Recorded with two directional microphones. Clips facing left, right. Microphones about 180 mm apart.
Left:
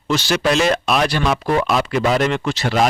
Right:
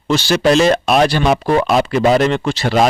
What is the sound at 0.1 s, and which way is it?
Speech, 30° right (ahead or behind).